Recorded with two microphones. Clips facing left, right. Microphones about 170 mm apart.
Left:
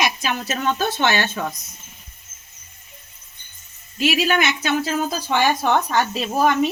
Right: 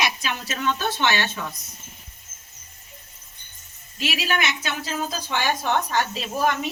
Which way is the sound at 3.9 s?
50° left (ahead or behind).